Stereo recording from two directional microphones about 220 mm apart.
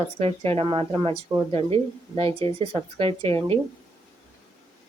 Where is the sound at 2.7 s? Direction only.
25° right (ahead or behind).